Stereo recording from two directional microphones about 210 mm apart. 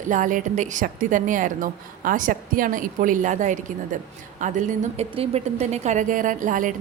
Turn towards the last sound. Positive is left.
turn(degrees=-40)  # may be behind; listen again after turning